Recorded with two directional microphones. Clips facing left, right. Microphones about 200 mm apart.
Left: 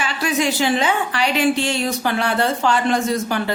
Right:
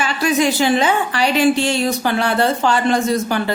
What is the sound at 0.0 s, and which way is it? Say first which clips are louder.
A woman's voice: right 4 dB; 40° right (ahead or behind).